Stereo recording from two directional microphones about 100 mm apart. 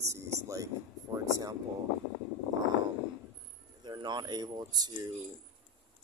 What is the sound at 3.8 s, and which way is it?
Speech, 45° right (ahead or behind).